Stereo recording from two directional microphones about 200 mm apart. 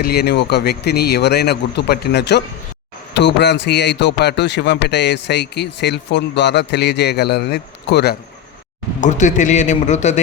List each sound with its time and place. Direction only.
0.0 s a man's voice: 50° left (ahead or behind)
9.0 s a man's voice: 40° left (ahead or behind)